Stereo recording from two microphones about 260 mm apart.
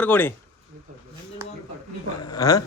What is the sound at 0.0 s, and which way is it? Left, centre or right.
Speech, centre.